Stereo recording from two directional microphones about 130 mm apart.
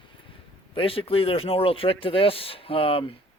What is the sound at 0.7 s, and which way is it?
Speech, 45° left (ahead or behind).